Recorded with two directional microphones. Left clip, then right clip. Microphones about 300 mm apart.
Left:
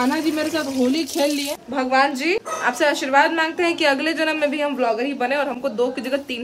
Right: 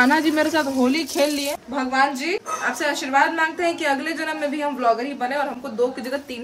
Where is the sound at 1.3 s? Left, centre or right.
Centre.